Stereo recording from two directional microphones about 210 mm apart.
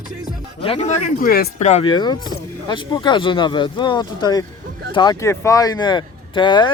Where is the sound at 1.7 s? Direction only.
30° left (ahead or behind).